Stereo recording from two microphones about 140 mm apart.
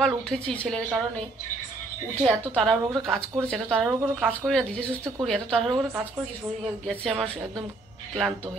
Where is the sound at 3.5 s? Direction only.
5° left (ahead or behind).